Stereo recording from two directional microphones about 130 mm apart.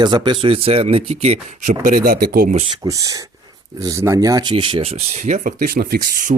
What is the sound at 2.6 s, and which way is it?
Speech, 55° right (ahead or behind).